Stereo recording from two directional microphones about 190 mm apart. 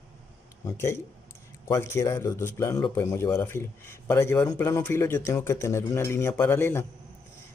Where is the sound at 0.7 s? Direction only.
15° left (ahead or behind).